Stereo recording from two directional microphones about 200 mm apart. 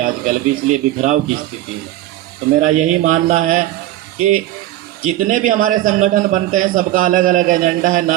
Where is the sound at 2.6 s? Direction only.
40° right (ahead or behind).